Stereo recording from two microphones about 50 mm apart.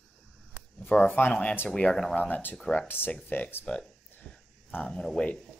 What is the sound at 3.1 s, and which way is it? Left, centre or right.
Speech, left.